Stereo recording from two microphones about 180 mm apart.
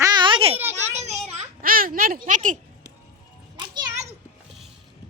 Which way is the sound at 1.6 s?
55° right (ahead or behind).